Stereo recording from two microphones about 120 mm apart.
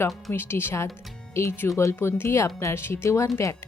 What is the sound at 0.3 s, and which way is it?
A woman's voice, 20° left (ahead or behind).